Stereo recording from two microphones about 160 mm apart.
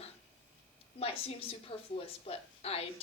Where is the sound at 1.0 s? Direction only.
35° left (ahead or behind).